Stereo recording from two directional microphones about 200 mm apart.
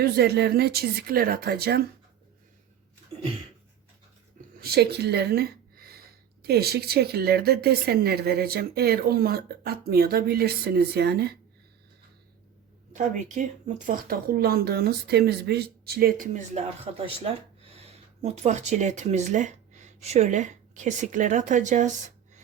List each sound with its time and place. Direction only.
0.0 s speech: 55° right (ahead or behind)
4.4 s a sound: 50° right (ahead or behind)
6.4 s speech: 50° right (ahead or behind)
12.9 s speech: 40° right (ahead or behind)